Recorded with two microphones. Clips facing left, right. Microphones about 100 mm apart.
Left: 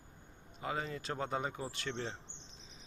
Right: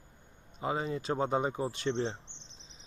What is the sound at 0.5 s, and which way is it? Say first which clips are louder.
Speech: right 6 dB; 20° right (ahead or behind).